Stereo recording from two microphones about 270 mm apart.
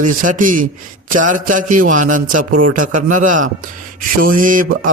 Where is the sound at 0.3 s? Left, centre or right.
Right.